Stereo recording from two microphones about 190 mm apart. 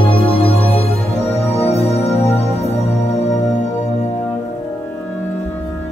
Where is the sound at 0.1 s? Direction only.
30° left (ahead or behind).